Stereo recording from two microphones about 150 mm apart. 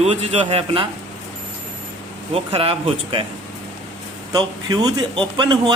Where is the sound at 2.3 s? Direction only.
40° right (ahead or behind).